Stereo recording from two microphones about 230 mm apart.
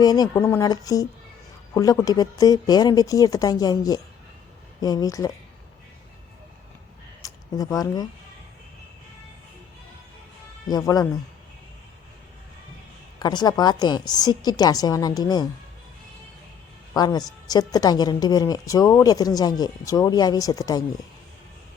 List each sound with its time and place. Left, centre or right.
0.0 s a woman's voice: centre
7.2 s a sound: centre
10.7 s a woman's voice: centre
13.1 s a woman's voice: centre
16.9 s a woman's voice: centre